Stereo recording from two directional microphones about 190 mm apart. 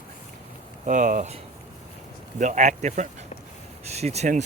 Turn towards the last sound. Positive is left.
turn(degrees=-40)  # may be behind; listen again after turning